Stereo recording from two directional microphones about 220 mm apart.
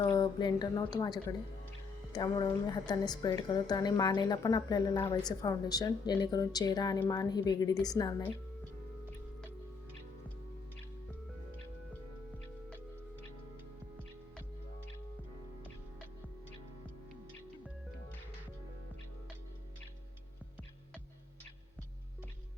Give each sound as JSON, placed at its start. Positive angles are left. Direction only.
{"t": 0.0, "sound": "a woman's voice", "side_deg": 20}